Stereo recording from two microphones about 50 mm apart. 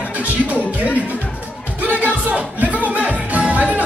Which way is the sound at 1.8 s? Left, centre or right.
Right.